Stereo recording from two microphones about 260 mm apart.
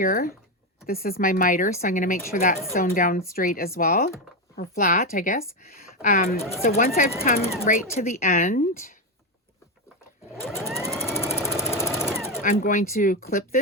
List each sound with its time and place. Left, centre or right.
0.0 s speech: left
10.4 s sewing machine: centre
10.7 s a sound: centre
11.3 s a sound: centre
12.0 s sewing machine: centre
12.4 s speech: left